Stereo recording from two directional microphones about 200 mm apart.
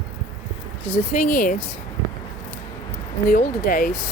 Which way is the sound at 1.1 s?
45° left (ahead or behind).